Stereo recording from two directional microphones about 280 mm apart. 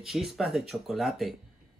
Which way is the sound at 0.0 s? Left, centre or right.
Centre.